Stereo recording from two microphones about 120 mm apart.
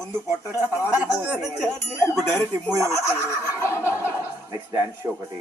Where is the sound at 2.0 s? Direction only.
15° left (ahead or behind).